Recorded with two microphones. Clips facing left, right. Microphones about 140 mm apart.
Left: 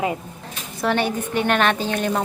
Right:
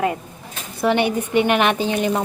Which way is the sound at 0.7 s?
15° right (ahead or behind).